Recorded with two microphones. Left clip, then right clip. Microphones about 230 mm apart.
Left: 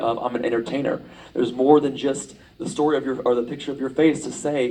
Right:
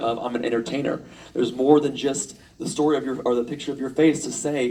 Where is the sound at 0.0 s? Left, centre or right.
Right.